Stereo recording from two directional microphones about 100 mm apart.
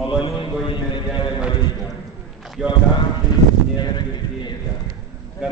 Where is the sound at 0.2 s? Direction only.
55° left (ahead or behind).